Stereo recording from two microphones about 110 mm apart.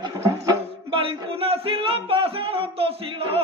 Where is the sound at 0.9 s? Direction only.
60° right (ahead or behind).